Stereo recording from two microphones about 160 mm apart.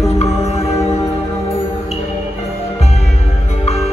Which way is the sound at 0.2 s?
40° left (ahead or behind).